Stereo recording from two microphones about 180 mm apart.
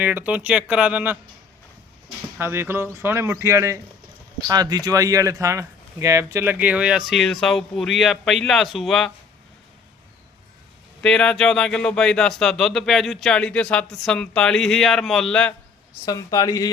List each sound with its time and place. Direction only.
0.0 s a man's voice: 10° right (ahead or behind)
2.4 s a man's voice: 15° right (ahead or behind)
11.0 s speech: 5° left (ahead or behind)
16.0 s speech: 20° left (ahead or behind)